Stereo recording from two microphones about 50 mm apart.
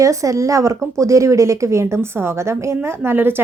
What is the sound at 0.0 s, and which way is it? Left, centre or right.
Speech, right.